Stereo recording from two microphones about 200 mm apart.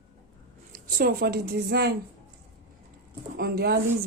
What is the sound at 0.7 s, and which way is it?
A woman's voice, 50° right (ahead or behind).